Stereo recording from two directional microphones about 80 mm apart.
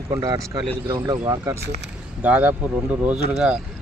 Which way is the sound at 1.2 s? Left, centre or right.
Right.